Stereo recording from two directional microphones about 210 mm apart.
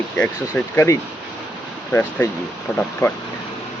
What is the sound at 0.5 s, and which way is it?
Speech, 10° left (ahead or behind).